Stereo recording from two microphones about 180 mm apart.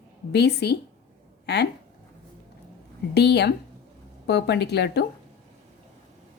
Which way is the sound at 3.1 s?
70° left (ahead or behind).